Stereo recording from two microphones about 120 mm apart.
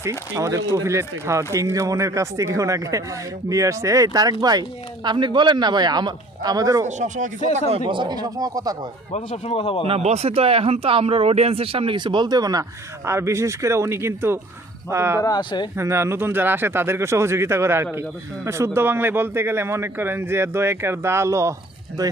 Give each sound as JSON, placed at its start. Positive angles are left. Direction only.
{"t": 0.0, "sound": "a man's voice", "side_deg": -25}
{"t": 6.8, "sound": "speech", "side_deg": -85}
{"t": 7.9, "sound": "a man's voice", "side_deg": -40}
{"t": 9.1, "sound": "speech", "side_deg": 65}
{"t": 9.6, "sound": "speech", "side_deg": 50}
{"t": 9.8, "sound": "a man's voice", "side_deg": -55}
{"t": 15.2, "sound": "speech", "side_deg": 35}
{"t": 15.7, "sound": "speech", "side_deg": -20}